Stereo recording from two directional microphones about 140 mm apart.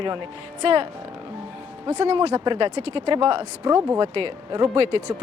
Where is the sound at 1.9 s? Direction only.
50° right (ahead or behind).